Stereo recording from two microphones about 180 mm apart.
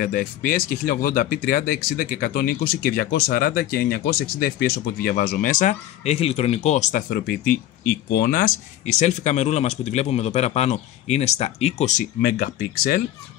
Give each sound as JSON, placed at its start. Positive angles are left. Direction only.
{"t": 0.0, "sound": "speech", "side_deg": 50}